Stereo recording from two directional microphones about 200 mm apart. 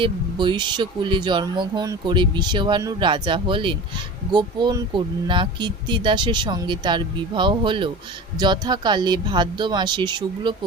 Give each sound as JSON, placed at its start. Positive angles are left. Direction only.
{"t": 0.0, "sound": "speech", "side_deg": -20}